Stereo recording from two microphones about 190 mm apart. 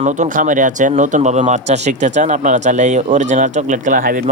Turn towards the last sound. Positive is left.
turn(degrees=-45)  # may be behind; listen again after turning